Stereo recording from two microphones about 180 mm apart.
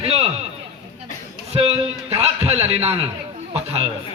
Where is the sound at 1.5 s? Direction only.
35° right (ahead or behind).